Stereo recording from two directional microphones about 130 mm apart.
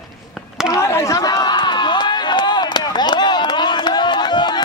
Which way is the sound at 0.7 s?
20° left (ahead or behind).